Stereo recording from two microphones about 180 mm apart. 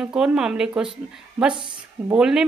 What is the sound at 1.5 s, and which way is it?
Speech, 25° right (ahead or behind).